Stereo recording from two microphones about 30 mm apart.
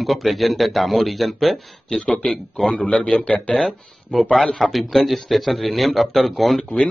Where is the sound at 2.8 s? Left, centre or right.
Left.